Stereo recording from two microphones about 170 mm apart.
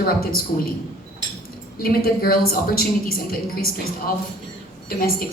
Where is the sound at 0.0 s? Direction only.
60° left (ahead or behind).